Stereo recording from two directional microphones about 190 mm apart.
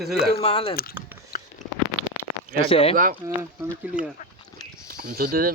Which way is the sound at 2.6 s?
30° left (ahead or behind).